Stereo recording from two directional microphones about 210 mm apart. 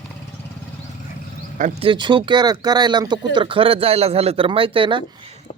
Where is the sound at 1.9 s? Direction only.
20° right (ahead or behind).